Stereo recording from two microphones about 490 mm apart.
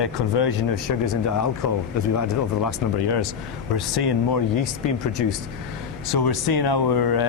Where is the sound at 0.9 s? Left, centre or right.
Left.